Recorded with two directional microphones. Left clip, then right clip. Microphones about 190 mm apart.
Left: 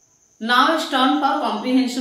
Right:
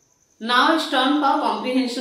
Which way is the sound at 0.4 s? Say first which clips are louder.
Left 1 dB; 15° left (ahead or behind).